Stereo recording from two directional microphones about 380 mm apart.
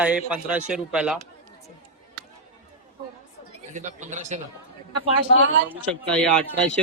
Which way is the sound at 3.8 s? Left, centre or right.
Centre.